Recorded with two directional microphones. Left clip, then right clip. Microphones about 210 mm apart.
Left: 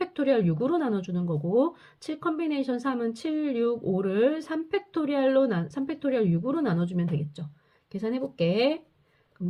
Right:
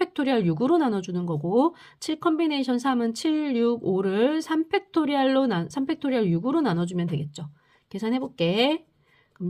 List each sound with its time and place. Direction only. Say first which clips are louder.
0.0 s speech: right 1 dB; 40° right (ahead or behind)